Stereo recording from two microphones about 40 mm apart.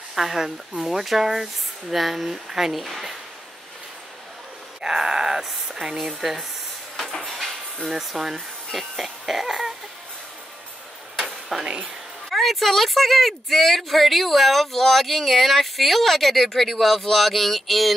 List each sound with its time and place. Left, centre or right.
0.1 s a woman's voice: centre
4.8 s speech: centre
7.0 s a sound: centre
7.9 s speech: centre
11.1 s a sound: centre
11.6 s speech: right
12.3 s a woman's voice: centre